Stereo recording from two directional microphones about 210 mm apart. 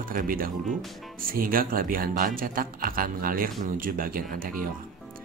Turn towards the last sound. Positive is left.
turn(degrees=-40)  # may be behind; listen again after turning